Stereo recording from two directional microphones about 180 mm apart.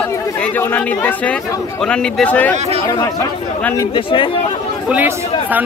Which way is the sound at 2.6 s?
35° right (ahead or behind).